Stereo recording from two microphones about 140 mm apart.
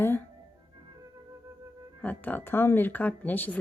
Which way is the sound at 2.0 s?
10° left (ahead or behind).